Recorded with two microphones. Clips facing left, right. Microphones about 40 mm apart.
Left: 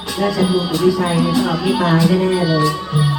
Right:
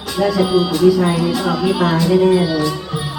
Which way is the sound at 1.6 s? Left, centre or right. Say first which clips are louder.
Even; centre.